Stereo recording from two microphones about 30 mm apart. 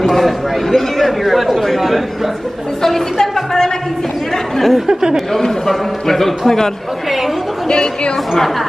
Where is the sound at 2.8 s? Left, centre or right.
Centre.